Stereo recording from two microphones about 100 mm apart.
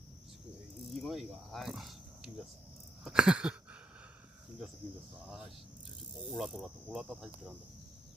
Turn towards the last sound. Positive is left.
turn(degrees=-5)  # may be behind; listen again after turning